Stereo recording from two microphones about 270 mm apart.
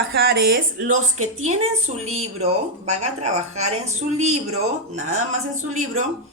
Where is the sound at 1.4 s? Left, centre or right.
Right.